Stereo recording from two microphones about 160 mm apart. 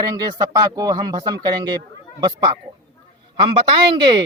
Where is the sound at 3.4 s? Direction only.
30° right (ahead or behind).